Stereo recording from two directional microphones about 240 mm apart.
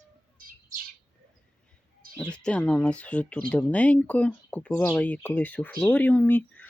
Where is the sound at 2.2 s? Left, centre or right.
Centre.